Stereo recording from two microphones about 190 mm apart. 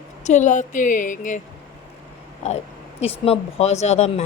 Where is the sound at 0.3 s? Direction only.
40° left (ahead or behind).